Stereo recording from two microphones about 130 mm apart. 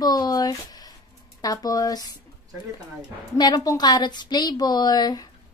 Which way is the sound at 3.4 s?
30° left (ahead or behind).